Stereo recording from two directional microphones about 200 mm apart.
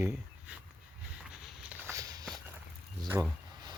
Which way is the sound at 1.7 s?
15° right (ahead or behind).